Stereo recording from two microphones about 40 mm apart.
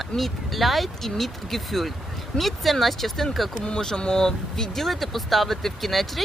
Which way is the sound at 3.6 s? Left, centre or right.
Centre.